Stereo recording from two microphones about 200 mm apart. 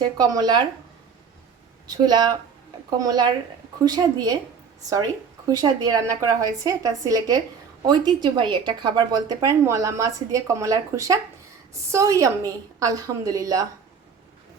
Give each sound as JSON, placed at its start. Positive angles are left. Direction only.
{"t": 0.2, "sound": "a woman's voice", "side_deg": -20}
{"t": 1.9, "sound": "a woman's voice", "side_deg": -20}
{"t": 5.5, "sound": "a woman's voice", "side_deg": -20}